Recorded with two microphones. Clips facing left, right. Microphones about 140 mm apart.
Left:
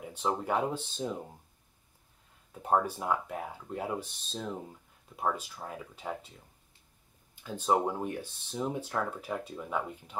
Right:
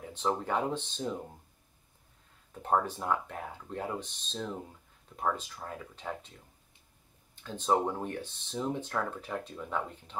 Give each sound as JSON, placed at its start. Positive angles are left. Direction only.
{"t": 0.1, "sound": "speech", "side_deg": 10}
{"t": 2.6, "sound": "speech", "side_deg": 10}
{"t": 7.3, "sound": "speech", "side_deg": 10}